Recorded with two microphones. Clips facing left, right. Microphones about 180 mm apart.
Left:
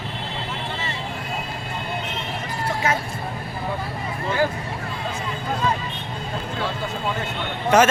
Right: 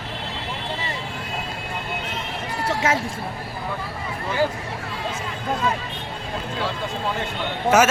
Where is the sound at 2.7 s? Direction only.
90° right.